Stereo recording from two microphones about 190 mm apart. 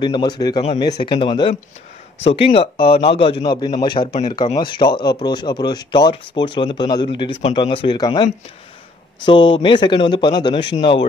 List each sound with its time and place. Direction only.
0.0 s speech: 20° left (ahead or behind)